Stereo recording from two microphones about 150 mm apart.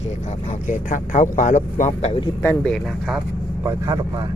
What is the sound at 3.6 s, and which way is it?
Speech, 20° right (ahead or behind).